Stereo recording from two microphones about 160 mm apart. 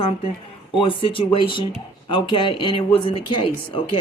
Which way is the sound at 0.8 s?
35° left (ahead or behind).